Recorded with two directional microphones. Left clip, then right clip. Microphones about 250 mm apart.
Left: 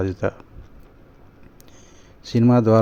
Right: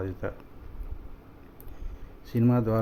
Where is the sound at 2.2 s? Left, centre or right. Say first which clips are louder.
Left 9 dB; left.